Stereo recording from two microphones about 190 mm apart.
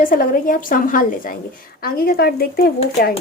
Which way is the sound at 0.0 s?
45° left (ahead or behind).